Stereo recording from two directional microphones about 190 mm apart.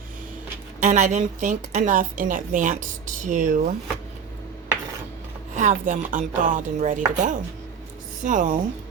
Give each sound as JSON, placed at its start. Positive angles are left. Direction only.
{"t": 0.8, "sound": "a woman's voice", "side_deg": -40}
{"t": 5.5, "sound": "chopping", "side_deg": -40}
{"t": 8.2, "sound": "a woman's voice", "side_deg": -45}